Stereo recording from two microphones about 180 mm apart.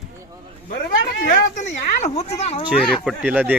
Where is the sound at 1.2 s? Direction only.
45° left (ahead or behind).